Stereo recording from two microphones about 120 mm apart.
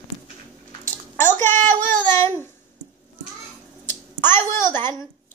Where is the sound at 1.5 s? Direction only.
90° right.